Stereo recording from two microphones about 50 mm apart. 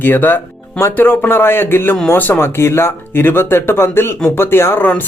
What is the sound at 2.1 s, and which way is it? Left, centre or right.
Speech, left.